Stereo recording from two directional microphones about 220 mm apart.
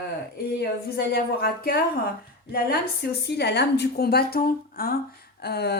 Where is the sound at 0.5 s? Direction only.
45° left (ahead or behind).